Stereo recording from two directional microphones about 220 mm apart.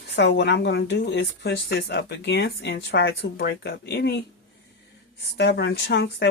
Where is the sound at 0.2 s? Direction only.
50° left (ahead or behind).